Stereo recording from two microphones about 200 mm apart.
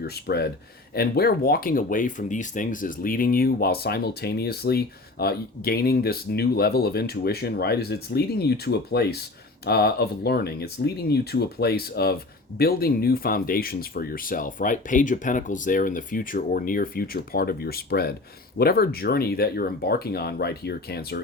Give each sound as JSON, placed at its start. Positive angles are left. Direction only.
{"t": 0.0, "sound": "speech", "side_deg": 55}